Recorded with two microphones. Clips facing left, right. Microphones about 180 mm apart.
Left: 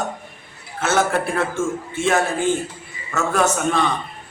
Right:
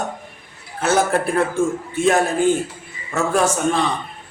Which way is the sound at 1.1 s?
35° right (ahead or behind).